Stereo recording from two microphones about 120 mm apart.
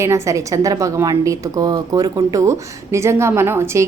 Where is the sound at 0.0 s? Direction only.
25° right (ahead or behind).